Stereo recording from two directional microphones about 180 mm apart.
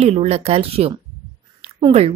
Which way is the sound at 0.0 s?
35° right (ahead or behind).